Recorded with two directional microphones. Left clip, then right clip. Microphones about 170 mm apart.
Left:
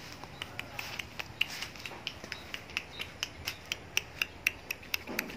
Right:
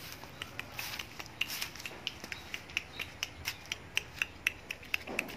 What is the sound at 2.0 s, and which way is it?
Finger snapping, 10° left (ahead or behind).